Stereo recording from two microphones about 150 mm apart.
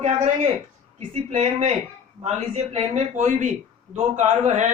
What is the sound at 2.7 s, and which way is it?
Speech, 45° right (ahead or behind).